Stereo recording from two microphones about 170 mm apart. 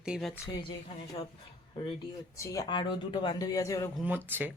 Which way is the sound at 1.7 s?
30° left (ahead or behind).